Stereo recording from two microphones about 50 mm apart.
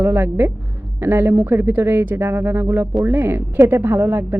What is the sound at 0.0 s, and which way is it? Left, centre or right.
Speech, right.